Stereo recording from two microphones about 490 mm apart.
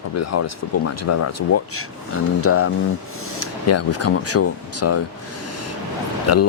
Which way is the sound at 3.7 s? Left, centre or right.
Left.